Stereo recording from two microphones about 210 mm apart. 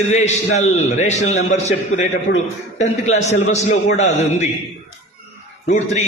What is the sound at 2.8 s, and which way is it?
A man's voice, 35° left (ahead or behind).